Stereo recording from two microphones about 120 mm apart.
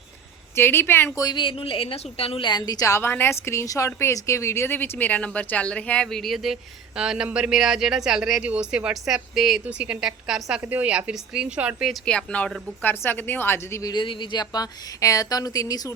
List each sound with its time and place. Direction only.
0.5 s a woman's voice: 20° left (ahead or behind)
1.2 s a woman's voice: 40° left (ahead or behind); by 10.6 s 5° right (ahead or behind)
10.6 s a woman's voice: 15° right (ahead or behind)
12.0 s a woman's voice: 10° left (ahead or behind)
13.9 s speech: 40° left (ahead or behind)